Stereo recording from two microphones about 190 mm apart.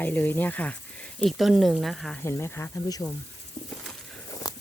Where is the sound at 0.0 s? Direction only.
10° left (ahead or behind).